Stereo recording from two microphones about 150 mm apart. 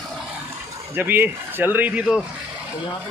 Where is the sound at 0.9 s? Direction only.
15° right (ahead or behind).